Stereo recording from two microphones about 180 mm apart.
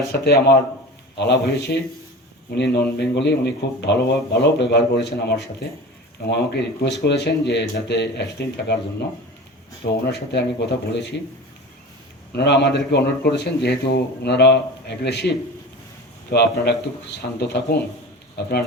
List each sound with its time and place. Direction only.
0.1 s a man's voice: 60° left (ahead or behind)
9.8 s a man's voice: 65° left (ahead or behind)
12.3 s a man's voice: 70° left (ahead or behind)
16.3 s speech: 65° left (ahead or behind)